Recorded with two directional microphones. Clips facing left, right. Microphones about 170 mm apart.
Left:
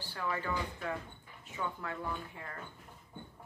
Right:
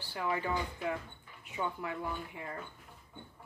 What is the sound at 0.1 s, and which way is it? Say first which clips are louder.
Speech: right 3 dB; 15° right (ahead or behind).